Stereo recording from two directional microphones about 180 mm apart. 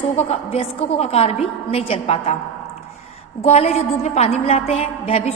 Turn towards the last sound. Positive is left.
turn(degrees=35)  # may be behind; listen again after turning